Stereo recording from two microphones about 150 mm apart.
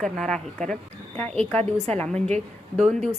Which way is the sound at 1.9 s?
5° left (ahead or behind).